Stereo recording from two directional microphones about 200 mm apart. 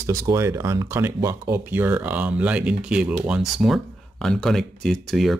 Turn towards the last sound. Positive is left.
turn(degrees=0)  # may be behind; listen again after turning